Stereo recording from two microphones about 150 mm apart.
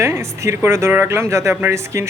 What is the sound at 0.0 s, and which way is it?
Speech, 20° right (ahead or behind).